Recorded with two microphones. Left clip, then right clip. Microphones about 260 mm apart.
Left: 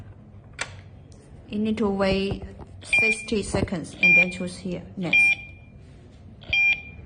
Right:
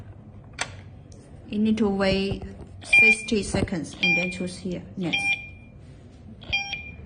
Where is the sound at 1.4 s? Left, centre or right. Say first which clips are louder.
Right 1 dB; left.